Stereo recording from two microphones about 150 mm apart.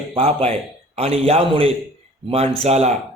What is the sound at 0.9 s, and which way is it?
A man's voice, 40° right (ahead or behind).